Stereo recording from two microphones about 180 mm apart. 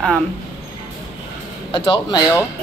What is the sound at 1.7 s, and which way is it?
Speech, 25° left (ahead or behind).